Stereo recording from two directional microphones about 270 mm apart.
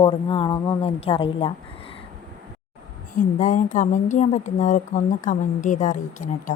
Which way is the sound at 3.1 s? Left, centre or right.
Left.